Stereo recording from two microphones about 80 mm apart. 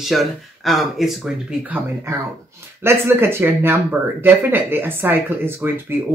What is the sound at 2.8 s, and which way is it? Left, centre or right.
Speech, right.